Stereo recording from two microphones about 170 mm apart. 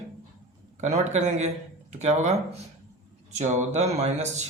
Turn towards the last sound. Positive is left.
turn(degrees=-40)  # may be behind; listen again after turning